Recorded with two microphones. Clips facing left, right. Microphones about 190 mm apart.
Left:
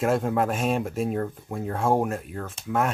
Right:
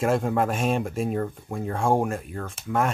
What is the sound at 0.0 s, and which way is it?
Speech, centre (ahead or behind).